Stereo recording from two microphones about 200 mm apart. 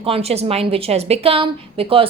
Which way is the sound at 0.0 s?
30° right (ahead or behind).